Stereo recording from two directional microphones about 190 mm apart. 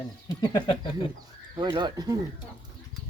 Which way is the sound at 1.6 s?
25° right (ahead or behind).